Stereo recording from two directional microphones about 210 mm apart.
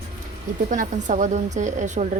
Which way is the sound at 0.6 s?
35° right (ahead or behind).